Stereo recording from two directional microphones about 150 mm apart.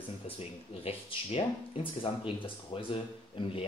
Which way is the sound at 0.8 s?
40° left (ahead or behind).